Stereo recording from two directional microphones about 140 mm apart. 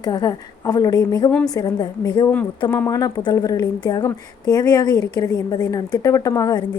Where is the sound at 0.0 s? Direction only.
30° left (ahead or behind).